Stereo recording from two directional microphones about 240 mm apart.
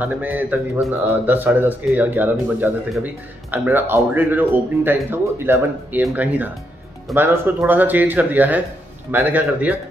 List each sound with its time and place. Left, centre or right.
0.0 s a man's voice: centre